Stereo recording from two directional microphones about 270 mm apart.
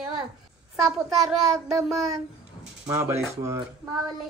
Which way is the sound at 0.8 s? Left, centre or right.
Centre.